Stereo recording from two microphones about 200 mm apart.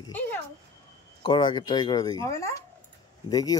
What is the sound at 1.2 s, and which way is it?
Speech, 25° left (ahead or behind).